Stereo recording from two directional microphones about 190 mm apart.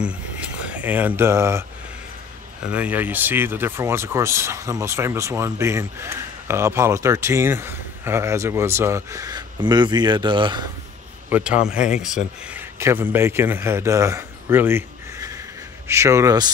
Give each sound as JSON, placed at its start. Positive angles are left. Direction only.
{"t": 0.0, "sound": "speech", "side_deg": -5}
{"t": 2.7, "sound": "speech", "side_deg": -10}
{"t": 11.2, "sound": "a man's voice", "side_deg": -10}